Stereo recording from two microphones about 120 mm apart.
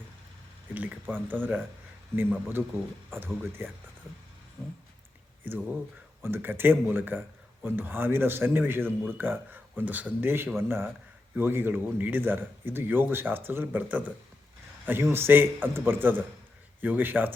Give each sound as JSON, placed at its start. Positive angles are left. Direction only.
{"t": 0.7, "sound": "speech", "side_deg": -15}
{"t": 6.2, "sound": "speech", "side_deg": -20}